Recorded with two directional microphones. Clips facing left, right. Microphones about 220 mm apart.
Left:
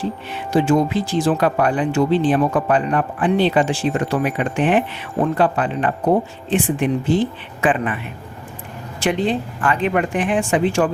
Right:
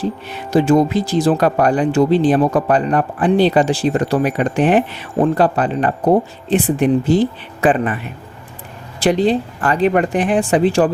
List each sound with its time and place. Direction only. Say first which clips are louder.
0.0 s speech: right 3 dB; 40° right (ahead or behind)
9.0 s speech: right 5 dB; 35° right (ahead or behind)